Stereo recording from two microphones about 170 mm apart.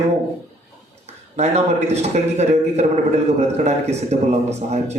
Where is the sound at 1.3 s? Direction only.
40° right (ahead or behind).